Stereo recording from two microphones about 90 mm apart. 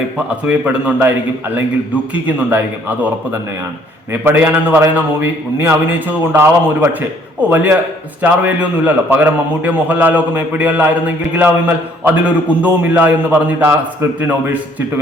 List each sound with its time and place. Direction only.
0.4 s a man's voice: 15° right (ahead or behind)
2.2 s a man's voice: 20° right (ahead or behind)
4.1 s a man's voice: 25° right (ahead or behind)